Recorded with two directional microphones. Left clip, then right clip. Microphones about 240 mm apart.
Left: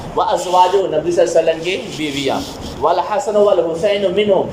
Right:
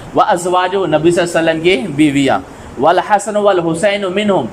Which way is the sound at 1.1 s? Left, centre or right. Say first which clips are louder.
Even; right.